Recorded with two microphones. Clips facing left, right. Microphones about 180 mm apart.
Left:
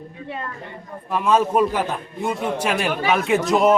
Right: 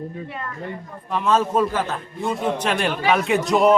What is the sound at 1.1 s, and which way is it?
Speech, 10° left (ahead or behind).